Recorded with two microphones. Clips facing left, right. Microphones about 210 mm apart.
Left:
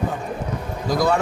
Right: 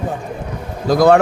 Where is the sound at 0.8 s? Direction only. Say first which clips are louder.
Right 9 dB; 75° right (ahead or behind).